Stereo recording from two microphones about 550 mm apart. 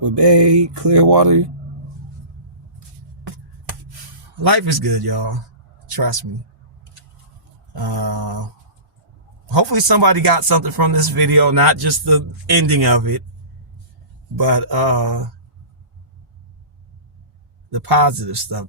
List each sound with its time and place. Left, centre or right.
0.1 s speech: right
4.4 s speech: right
7.8 s speech: right
9.5 s speech: right
14.3 s speech: right
17.7 s speech: right